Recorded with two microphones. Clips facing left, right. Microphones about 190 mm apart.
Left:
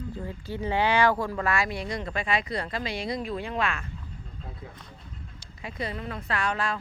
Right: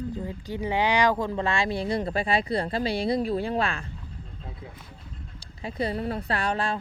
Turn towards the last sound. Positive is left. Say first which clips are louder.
# right 2 dB
turn(degrees=-30)  # may be behind; listen again after turning